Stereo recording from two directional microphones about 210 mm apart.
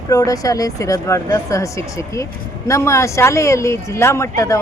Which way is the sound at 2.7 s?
15° left (ahead or behind).